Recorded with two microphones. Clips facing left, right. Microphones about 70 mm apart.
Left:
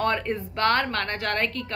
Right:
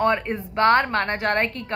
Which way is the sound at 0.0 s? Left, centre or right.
Centre.